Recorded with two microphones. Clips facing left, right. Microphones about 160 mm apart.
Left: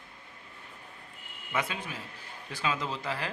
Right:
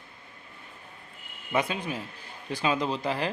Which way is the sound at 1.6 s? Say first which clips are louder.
Right 6 dB; 15° right (ahead or behind).